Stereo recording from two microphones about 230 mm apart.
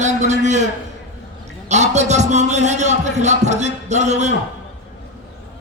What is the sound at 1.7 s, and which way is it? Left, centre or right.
A man's voice, right.